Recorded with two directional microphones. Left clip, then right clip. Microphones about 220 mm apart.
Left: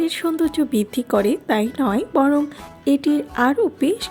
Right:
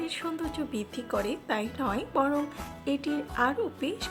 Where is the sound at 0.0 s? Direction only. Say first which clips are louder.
Left 13 dB; 25° left (ahead or behind).